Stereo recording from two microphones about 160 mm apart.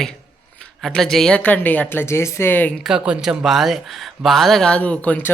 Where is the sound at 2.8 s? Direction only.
5° right (ahead or behind).